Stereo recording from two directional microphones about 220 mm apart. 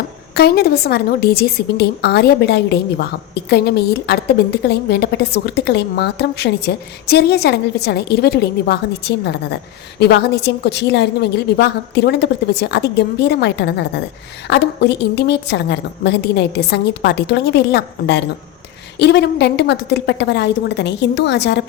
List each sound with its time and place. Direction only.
0.3 s a woman's voice: 45° left (ahead or behind)